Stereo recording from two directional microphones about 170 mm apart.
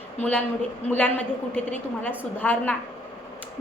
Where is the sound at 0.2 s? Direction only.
5° left (ahead or behind).